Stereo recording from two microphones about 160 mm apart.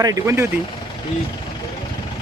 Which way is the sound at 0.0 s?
20° right (ahead or behind).